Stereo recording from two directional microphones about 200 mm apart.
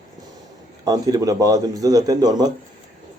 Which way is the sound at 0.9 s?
20° right (ahead or behind).